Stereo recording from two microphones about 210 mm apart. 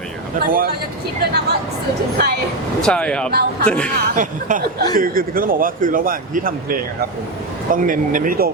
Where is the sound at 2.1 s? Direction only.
50° right (ahead or behind).